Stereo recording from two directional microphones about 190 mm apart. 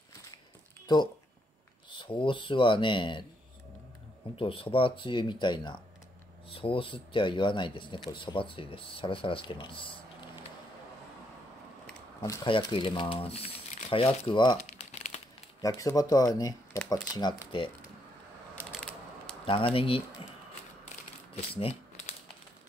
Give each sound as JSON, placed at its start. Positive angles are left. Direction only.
{"t": 1.9, "sound": "speech", "side_deg": 25}
{"t": 4.4, "sound": "speech", "side_deg": 30}
{"t": 12.2, "sound": "speech", "side_deg": 25}
{"t": 14.6, "sound": "crumpling", "side_deg": 40}
{"t": 15.6, "sound": "speech", "side_deg": 15}
{"t": 18.7, "sound": "a sound", "side_deg": 5}
{"t": 19.4, "sound": "speech", "side_deg": 30}
{"t": 21.5, "sound": "mechanisms", "side_deg": 30}